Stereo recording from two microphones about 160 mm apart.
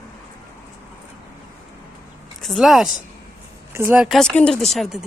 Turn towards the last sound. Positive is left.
turn(degrees=0)  # may be behind; listen again after turning